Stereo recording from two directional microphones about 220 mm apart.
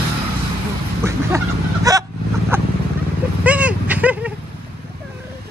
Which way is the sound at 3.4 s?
5° right (ahead or behind).